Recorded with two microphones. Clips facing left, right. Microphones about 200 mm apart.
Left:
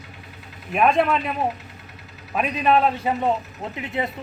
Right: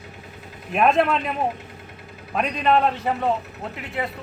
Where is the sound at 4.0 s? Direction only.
20° left (ahead or behind).